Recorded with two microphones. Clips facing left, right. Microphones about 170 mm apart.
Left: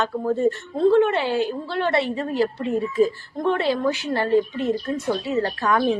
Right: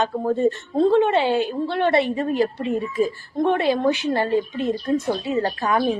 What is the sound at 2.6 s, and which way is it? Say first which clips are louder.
A woman's voice: left 2 dB; 10° right (ahead or behind).